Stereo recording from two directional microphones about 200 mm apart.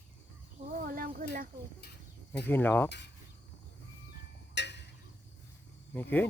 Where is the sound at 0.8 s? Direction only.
45° right (ahead or behind).